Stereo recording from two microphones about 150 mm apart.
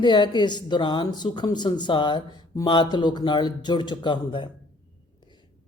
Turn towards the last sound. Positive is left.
turn(degrees=30)  # may be behind; listen again after turning